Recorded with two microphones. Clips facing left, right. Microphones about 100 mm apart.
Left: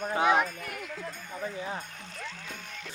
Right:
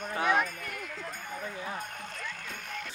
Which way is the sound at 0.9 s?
55° right (ahead or behind).